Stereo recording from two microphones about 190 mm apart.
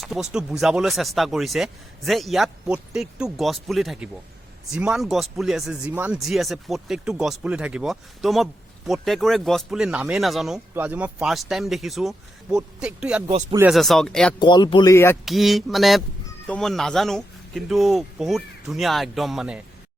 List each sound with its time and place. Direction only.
0.0 s speech: 5° right (ahead or behind)
14.3 s speech: 25° left (ahead or behind)
15.2 s speech: centre (ahead or behind)